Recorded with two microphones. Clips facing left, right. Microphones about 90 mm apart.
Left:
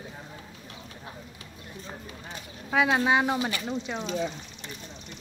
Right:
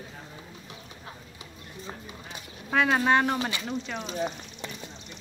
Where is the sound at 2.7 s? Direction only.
5° left (ahead or behind).